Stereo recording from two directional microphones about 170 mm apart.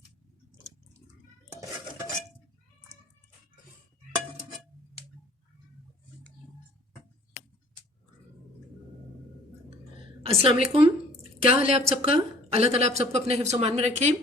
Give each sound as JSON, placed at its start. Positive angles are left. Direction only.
{"t": 10.2, "sound": "speech", "side_deg": -30}
{"t": 11.1, "sound": "drip", "side_deg": 55}
{"t": 11.5, "sound": "a woman's voice", "side_deg": -35}